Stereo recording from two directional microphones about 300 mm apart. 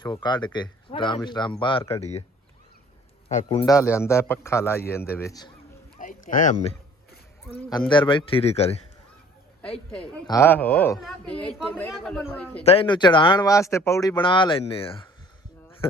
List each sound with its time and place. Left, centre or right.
0.0 s speech: centre
3.2 s speech: centre
6.0 s speech: left
7.5 s speech: centre
9.9 s a woman's voice: centre
12.6 s speech: centre